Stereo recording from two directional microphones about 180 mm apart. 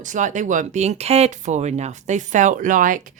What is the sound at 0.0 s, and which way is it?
Speech, 45° right (ahead or behind).